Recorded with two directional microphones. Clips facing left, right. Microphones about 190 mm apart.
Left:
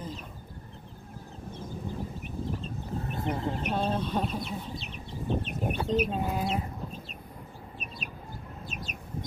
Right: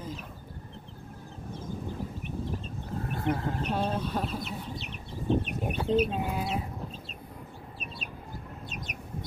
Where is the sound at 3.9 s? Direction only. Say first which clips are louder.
Left 1 dB; 10° right (ahead or behind).